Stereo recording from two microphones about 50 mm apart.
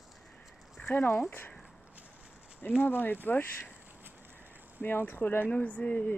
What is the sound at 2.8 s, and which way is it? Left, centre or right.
Speech, left.